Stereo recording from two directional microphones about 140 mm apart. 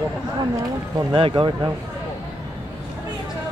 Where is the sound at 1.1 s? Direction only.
40° right (ahead or behind).